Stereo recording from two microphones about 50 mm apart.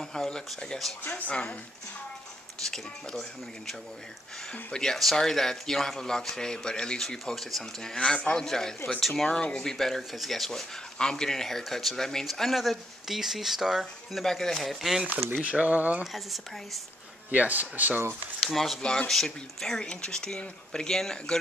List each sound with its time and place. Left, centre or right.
0.0 s a sound: centre
1.0 s a woman's voice: left
2.6 s speech: centre
4.9 s speech: centre
9.3 s speech: centre
11.0 s speech: centre
14.2 s speech: centre
15.4 s speech: right
16.0 s speech: centre
17.3 s speech: right
18.5 s speech: centre
18.8 s speech: centre
19.0 s speech: centre